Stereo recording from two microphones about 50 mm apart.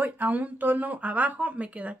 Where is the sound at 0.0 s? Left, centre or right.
Right.